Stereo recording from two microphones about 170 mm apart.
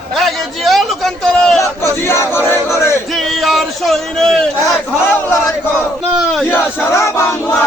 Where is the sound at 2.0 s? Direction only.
15° left (ahead or behind).